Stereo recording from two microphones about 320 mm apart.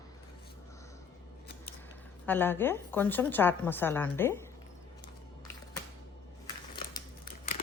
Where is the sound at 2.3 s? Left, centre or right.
Centre.